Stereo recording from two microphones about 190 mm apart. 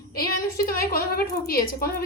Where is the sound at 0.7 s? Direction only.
50° left (ahead or behind).